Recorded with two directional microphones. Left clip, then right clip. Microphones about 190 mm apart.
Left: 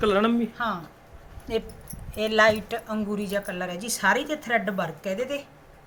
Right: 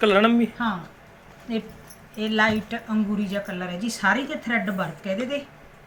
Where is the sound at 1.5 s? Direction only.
75° left (ahead or behind).